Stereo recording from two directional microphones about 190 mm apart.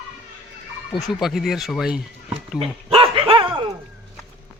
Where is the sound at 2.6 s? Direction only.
30° right (ahead or behind).